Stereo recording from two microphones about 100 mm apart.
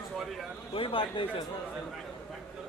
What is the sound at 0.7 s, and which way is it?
Speech, 60° left (ahead or behind).